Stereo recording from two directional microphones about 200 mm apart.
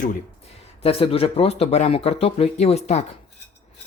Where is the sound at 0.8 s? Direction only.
30° left (ahead or behind).